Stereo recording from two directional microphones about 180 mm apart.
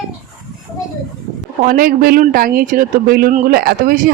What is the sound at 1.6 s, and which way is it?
Speech, 50° right (ahead or behind).